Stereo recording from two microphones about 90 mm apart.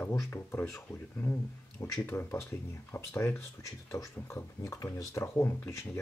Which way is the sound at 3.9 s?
30° left (ahead or behind).